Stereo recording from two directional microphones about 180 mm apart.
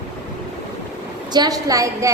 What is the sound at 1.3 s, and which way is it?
Speech, 20° right (ahead or behind).